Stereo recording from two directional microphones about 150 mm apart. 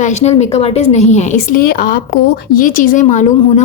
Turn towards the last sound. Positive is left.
turn(degrees=50)  # may be behind; listen again after turning